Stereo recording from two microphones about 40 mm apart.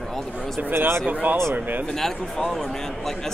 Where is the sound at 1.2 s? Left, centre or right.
Right.